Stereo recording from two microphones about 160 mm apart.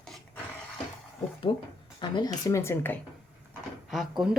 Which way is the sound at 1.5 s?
30° left (ahead or behind).